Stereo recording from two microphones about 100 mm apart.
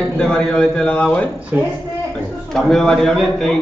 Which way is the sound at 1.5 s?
20° right (ahead or behind).